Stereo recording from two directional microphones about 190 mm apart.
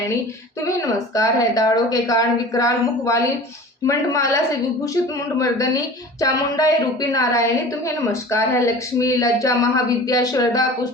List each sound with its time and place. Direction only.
0.8 s a woman's voice: 15° left (ahead or behind)
5.4 s a woman's voice: 15° left (ahead or behind)